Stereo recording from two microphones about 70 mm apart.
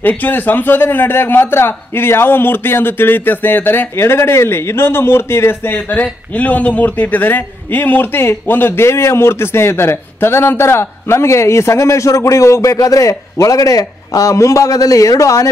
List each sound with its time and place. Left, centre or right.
0.2 s a man's voice: left